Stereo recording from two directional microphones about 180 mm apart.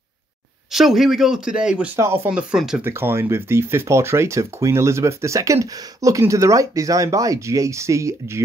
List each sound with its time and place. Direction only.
0.7 s speech: centre (ahead or behind)